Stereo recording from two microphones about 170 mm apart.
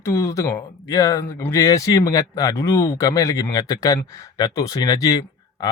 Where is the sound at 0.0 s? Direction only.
15° left (ahead or behind).